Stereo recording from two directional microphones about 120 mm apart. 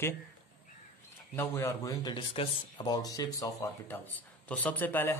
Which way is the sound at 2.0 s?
45° left (ahead or behind).